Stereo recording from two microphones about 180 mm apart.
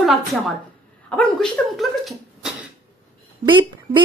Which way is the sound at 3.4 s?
25° right (ahead or behind).